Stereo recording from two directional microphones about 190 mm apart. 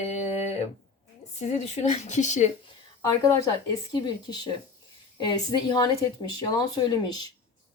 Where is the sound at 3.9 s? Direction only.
20° left (ahead or behind).